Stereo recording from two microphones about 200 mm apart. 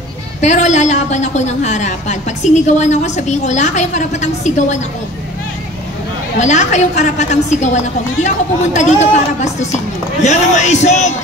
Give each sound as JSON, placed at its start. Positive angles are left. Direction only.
{"t": 0.4, "sound": "a woman's voice", "side_deg": 35}
{"t": 6.4, "sound": "a woman's voice", "side_deg": 35}